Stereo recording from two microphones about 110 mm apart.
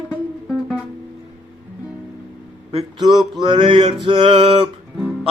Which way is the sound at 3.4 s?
45° right (ahead or behind).